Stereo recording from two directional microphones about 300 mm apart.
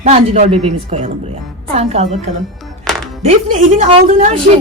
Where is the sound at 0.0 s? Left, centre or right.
Right.